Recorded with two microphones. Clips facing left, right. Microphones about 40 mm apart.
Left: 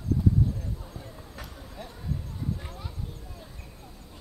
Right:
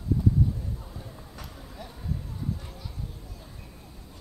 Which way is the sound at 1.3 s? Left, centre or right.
Centre.